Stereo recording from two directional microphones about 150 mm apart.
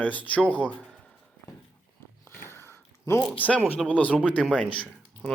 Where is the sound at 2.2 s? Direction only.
15° left (ahead or behind).